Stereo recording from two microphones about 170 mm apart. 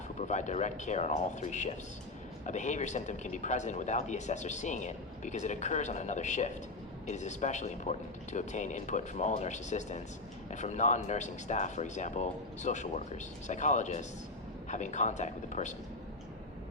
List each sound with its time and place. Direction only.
0.2 s speech: 45° left (ahead or behind)